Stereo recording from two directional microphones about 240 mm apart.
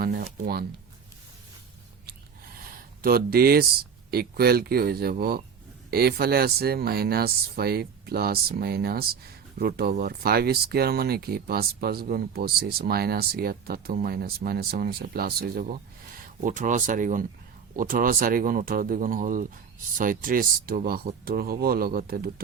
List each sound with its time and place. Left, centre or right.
0.0 s speech: right
3.0 s speech: right